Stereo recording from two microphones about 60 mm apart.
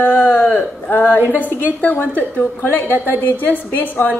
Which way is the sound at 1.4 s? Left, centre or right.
Left.